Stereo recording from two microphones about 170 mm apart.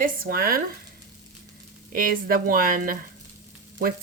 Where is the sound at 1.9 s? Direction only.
55° right (ahead or behind).